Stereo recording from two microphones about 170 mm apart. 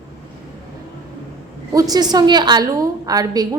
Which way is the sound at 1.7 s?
20° right (ahead or behind).